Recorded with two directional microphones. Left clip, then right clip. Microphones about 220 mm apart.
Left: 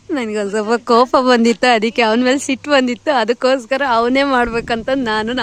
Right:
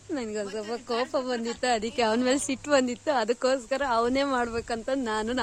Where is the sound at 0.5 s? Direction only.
35° left (ahead or behind).